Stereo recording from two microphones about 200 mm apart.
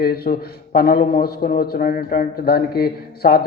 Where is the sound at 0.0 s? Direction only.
50° left (ahead or behind).